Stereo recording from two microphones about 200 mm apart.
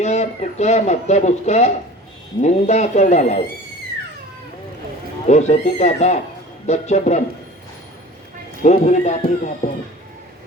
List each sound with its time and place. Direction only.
0.0 s speech: 35° left (ahead or behind)
5.3 s speech: 35° left (ahead or behind)
8.6 s speech: 35° left (ahead or behind)